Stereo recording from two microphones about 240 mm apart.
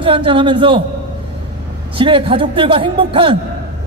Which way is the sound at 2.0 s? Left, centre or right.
Right.